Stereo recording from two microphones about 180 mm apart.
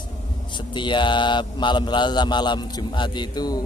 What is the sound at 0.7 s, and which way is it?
A man's voice, 25° left (ahead or behind).